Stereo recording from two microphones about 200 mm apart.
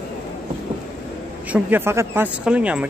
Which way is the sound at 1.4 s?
10° right (ahead or behind).